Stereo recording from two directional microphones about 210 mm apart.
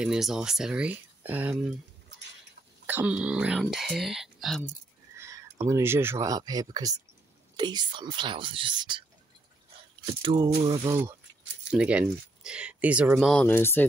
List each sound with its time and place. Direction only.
0.0 s speech: 5° right (ahead or behind)
2.9 s speech: 5° right (ahead or behind)
5.1 s speech: 15° right (ahead or behind)
10.2 s speech: 20° right (ahead or behind); by 13.8 s 10° left (ahead or behind)